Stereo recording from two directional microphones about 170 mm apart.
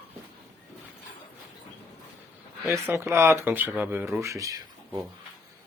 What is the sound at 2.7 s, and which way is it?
Speech, 15° right (ahead or behind).